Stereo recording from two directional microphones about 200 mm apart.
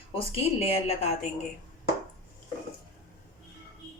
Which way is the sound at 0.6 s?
30° left (ahead or behind).